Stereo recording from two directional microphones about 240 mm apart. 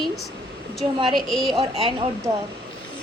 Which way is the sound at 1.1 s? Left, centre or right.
Centre.